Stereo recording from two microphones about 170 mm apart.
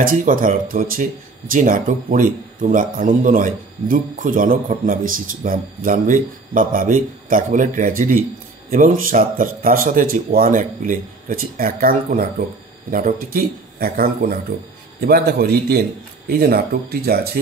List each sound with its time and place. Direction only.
0.0 s a man's voice: 55° right (ahead or behind)